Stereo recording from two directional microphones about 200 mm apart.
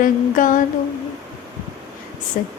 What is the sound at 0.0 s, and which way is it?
Mantra, 40° left (ahead or behind).